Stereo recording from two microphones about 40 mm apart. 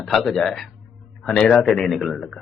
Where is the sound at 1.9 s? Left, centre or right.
Centre.